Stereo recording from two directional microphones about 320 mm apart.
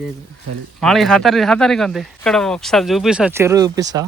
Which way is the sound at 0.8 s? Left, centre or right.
Centre.